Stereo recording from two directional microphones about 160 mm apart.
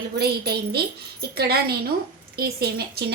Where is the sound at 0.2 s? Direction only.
80° right.